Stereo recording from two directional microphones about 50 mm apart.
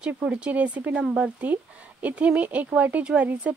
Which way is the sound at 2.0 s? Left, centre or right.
Right.